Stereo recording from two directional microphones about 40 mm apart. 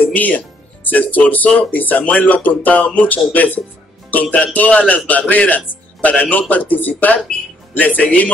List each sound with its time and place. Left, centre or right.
0.0 s a man's voice: left